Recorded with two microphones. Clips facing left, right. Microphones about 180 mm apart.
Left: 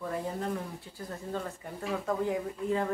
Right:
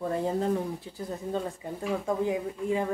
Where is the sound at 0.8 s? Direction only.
20° right (ahead or behind).